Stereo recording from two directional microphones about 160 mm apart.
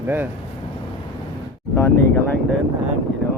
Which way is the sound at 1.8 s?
15° left (ahead or behind).